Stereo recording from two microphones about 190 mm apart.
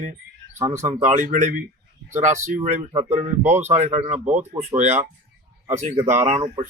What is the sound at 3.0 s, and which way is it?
Speech, 15° right (ahead or behind).